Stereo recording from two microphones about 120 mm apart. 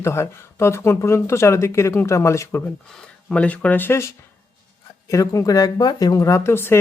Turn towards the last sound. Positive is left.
turn(degrees=20)  # may be behind; listen again after turning